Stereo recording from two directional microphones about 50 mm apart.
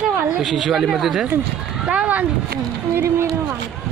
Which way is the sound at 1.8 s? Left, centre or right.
Right.